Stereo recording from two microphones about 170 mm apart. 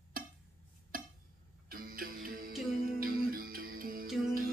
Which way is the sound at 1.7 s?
55° right (ahead or behind).